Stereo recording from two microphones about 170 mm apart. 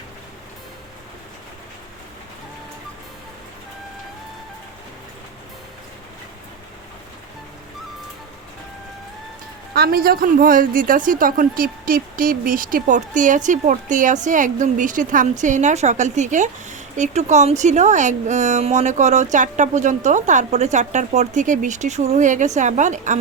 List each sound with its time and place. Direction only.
9.7 s a woman's voice: 65° right (ahead or behind); by 23.1 s 45° right (ahead or behind)